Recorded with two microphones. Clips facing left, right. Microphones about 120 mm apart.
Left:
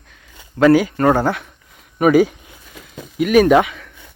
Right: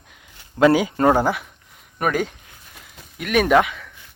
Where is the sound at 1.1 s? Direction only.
5° right (ahead or behind).